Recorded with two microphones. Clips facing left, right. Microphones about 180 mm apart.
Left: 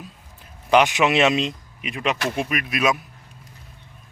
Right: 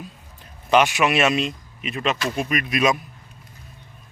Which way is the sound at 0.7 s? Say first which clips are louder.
Left 1 dB; 15° left (ahead or behind).